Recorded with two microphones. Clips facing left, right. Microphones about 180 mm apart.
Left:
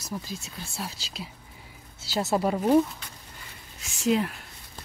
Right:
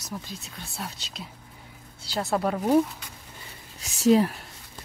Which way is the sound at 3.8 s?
35° right (ahead or behind).